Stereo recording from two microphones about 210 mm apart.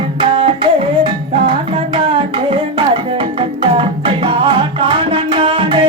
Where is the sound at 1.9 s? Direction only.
25° right (ahead or behind).